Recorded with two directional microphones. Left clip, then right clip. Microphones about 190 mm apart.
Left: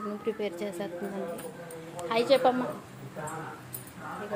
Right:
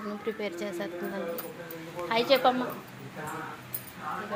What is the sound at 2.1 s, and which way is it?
Speech, 5° left (ahead or behind).